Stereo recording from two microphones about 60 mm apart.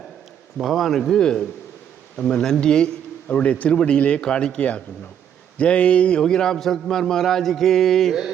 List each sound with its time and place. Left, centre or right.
0.6 s a man's voice: centre